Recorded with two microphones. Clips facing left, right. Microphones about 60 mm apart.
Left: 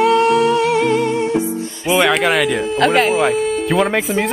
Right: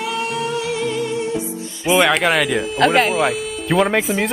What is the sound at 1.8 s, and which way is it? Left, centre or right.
Speech, centre.